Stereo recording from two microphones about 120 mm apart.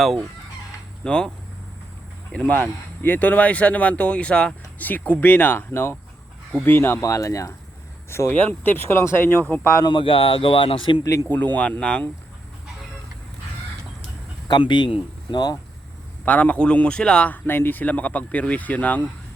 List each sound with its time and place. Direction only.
1.0 s speech: 5° left (ahead or behind)
2.3 s speech: 10° left (ahead or behind)
9.8 s speech: 45° left (ahead or behind)
11.3 s speech: 15° left (ahead or behind)
14.4 s speech: 40° left (ahead or behind)
16.2 s speech: 10° left (ahead or behind)